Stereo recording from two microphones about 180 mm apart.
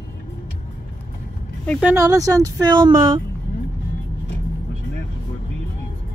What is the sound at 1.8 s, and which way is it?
Speech, 10° right (ahead or behind).